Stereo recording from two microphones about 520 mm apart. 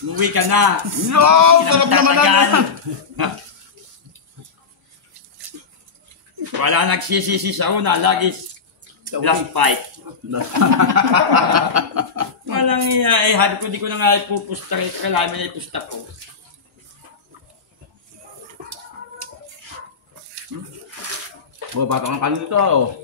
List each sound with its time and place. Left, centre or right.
0.2 s speech: right
6.6 s a man's voice: right
10.3 s speech: right
11.5 s snicker: right
12.4 s dog: right
12.8 s speech: right
20.5 s speech: right
21.7 s speech: right